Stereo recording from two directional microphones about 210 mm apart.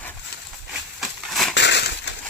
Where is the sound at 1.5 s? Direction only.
55° left (ahead or behind).